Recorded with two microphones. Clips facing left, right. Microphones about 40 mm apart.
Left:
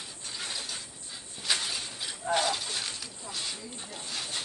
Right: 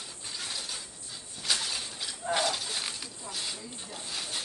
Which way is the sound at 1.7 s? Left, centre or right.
Centre.